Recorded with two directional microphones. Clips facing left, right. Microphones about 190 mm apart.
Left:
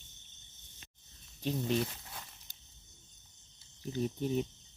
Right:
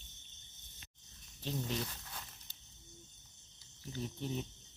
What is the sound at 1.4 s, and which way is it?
Speech, 20° left (ahead or behind).